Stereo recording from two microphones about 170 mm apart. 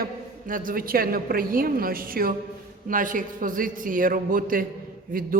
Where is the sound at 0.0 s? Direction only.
55° right (ahead or behind).